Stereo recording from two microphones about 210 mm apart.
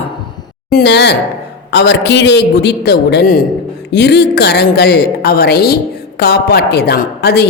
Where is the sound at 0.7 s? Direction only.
50° left (ahead or behind).